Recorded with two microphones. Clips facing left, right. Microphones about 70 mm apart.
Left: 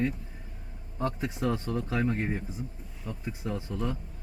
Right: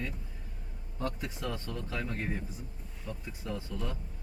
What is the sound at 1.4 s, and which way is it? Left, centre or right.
A man's voice, left.